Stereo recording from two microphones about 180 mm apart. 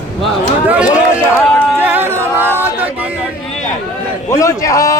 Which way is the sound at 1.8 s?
10° right (ahead or behind).